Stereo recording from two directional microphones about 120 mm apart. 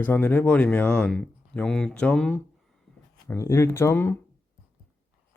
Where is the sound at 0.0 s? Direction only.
15° left (ahead or behind).